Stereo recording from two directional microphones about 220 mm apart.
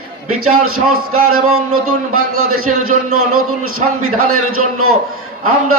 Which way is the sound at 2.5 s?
75° right (ahead or behind).